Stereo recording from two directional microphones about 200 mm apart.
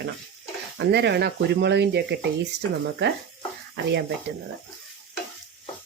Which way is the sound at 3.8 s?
60° right (ahead or behind).